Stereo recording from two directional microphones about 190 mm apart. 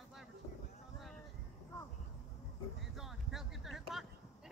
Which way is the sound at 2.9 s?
Centre (ahead or behind).